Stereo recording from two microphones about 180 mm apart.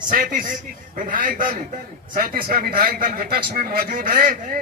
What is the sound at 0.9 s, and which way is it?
A man's voice, 50° right (ahead or behind).